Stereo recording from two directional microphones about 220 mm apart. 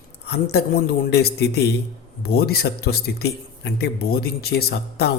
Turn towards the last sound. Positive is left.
turn(degrees=45)  # may be behind; listen again after turning